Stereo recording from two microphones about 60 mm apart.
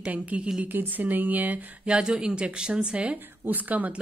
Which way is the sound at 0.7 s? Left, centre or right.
Right.